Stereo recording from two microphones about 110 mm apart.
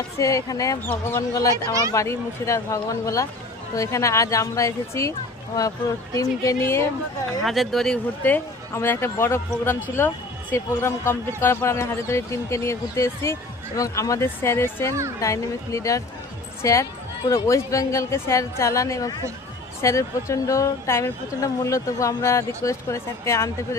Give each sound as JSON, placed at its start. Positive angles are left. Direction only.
{"t": 0.2, "sound": "a woman's voice", "side_deg": 30}
{"t": 6.1, "sound": "a woman's voice", "side_deg": 30}
{"t": 7.4, "sound": "speech", "side_deg": 0}
{"t": 8.2, "sound": "a woman's voice", "side_deg": 20}